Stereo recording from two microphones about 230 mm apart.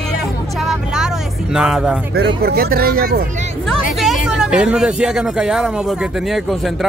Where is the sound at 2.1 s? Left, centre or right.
Right.